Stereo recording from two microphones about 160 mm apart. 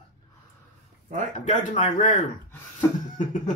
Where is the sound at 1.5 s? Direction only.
50° left (ahead or behind).